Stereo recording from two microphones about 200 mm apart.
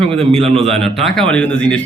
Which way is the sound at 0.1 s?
30° right (ahead or behind).